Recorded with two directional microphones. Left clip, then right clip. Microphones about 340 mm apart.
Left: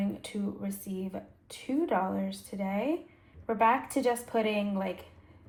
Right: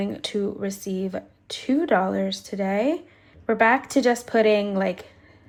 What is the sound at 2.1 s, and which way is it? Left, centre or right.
Speech, right.